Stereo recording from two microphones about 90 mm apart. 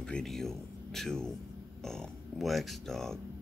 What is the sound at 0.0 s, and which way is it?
Speech, 5° left (ahead or behind).